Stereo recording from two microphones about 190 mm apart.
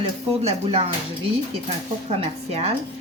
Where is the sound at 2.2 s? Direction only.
35° right (ahead or behind).